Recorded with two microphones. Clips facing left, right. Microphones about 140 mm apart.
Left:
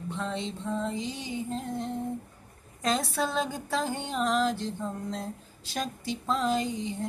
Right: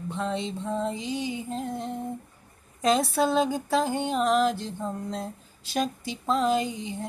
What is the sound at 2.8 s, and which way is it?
Speech, 15° right (ahead or behind).